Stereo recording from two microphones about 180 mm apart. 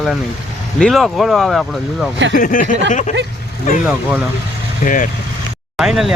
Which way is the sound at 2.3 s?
50° left (ahead or behind).